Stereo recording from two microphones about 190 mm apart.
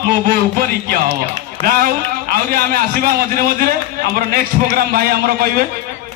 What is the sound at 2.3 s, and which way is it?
A man's voice, 50° right (ahead or behind).